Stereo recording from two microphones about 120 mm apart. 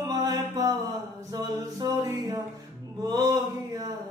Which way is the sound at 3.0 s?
35° right (ahead or behind).